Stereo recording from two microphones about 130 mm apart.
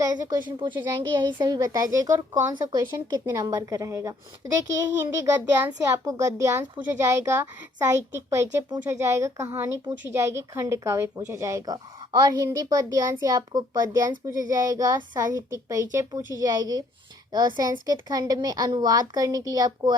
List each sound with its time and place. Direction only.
0.6 s speech: 35° right (ahead or behind)